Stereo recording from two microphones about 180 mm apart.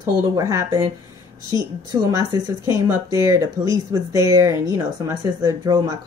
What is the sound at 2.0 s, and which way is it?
Speech, 25° right (ahead or behind).